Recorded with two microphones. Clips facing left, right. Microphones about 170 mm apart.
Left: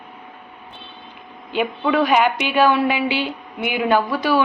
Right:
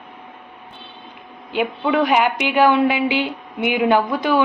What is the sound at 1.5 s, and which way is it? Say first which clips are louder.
A woman's voice: even; 15° right (ahead or behind).